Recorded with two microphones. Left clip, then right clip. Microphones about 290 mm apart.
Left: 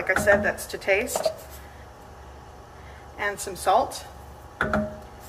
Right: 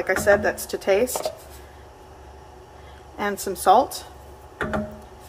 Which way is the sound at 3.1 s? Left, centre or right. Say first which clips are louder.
Right 2 dB; right.